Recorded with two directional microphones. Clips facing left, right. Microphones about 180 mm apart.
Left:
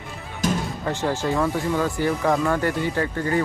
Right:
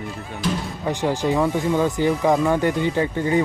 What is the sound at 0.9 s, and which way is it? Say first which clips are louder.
Speech: right 3 dB; 15° right (ahead or behind).